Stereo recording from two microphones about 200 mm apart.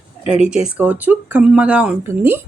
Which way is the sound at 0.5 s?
5° right (ahead or behind).